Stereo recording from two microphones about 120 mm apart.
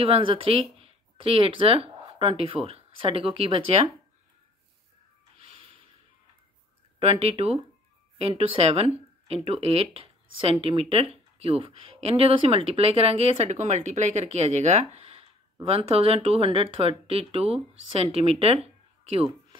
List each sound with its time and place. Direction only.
0.0 s speech: 50° right (ahead or behind)
5.4 s snort: 55° right (ahead or behind)
7.0 s speech: 55° right (ahead or behind); by 14.9 s 75° right (ahead or behind)
15.0 s a sound: 55° right (ahead or behind)
15.6 s speech: 55° right (ahead or behind)